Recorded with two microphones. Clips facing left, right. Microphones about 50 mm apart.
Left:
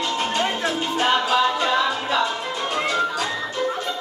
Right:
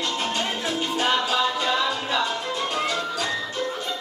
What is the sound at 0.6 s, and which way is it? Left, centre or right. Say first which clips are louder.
Music: left 3 dB; centre.